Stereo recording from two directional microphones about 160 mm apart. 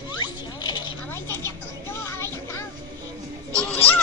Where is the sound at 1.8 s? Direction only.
15° left (ahead or behind).